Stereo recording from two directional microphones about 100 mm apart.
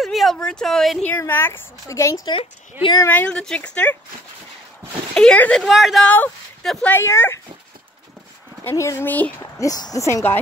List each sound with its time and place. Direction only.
0.0 s speech: centre (ahead or behind)
1.0 s speech: 20° left (ahead or behind)
3.1 s speech: 15° left (ahead or behind)
5.1 s speech: 10° left (ahead or behind)
5.7 s speech: 5° right (ahead or behind)
6.0 s speech: 15° left (ahead or behind)
6.6 s speech: 5° left (ahead or behind)
6.9 s speech: 25° left (ahead or behind)
8.6 s speech: 25° left (ahead or behind)
9.4 s speech: 35° left (ahead or behind)